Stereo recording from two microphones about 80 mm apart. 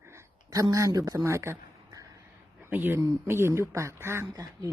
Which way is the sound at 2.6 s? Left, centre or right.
Right.